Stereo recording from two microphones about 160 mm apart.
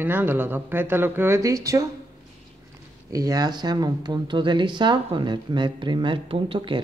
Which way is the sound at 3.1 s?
20° right (ahead or behind).